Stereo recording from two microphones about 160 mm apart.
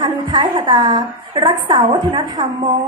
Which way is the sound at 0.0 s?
30° right (ahead or behind).